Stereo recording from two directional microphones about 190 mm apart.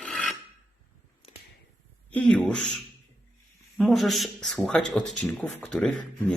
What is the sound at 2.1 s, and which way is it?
Speech, 5° left (ahead or behind).